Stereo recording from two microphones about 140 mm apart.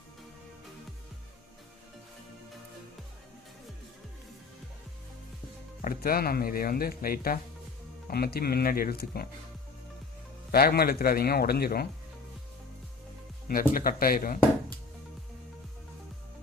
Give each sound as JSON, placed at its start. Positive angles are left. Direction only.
{"t": 5.8, "sound": "speech", "side_deg": 90}
{"t": 10.5, "sound": "speech", "side_deg": 90}
{"t": 13.5, "sound": "speech", "side_deg": 90}